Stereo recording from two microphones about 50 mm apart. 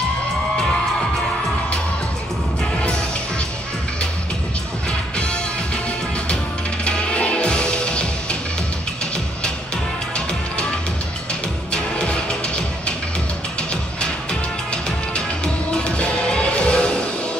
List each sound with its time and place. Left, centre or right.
5.1 s music: left
6.8 s music: left
11.7 s music: centre
14.7 s music: centre